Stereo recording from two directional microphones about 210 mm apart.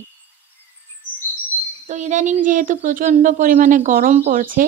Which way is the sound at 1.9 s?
35° right (ahead or behind).